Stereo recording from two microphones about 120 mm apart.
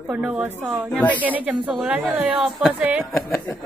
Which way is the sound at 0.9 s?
10° left (ahead or behind).